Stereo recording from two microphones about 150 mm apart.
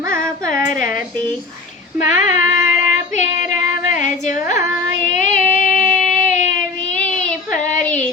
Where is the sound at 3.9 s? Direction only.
55° left (ahead or behind).